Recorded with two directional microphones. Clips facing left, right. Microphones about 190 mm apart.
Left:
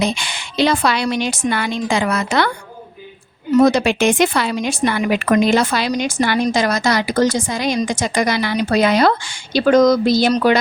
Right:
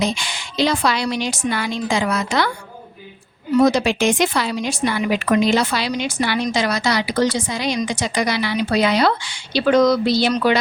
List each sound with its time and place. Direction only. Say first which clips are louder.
0.0 s a woman's voice: left 2 dB; 60° left (ahead or behind)
3.5 s a woman's voice: left 2 dB; 55° left (ahead or behind)